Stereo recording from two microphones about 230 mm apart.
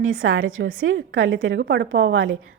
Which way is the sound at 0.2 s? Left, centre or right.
Right.